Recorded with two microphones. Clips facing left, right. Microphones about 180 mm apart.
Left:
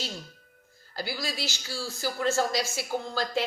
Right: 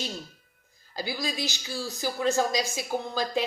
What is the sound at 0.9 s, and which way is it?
Speech, 15° right (ahead or behind).